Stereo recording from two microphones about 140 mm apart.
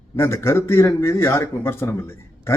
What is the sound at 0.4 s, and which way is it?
A man's voice, 20° left (ahead or behind).